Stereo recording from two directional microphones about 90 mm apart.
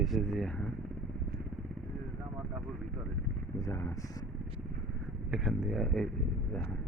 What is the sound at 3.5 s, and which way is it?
Speech, 35° left (ahead or behind).